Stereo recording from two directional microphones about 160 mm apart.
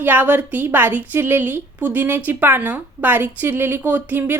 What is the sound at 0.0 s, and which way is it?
A woman's voice, 10° right (ahead or behind).